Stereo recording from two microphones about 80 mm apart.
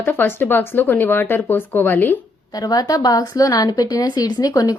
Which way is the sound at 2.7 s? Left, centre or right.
Left.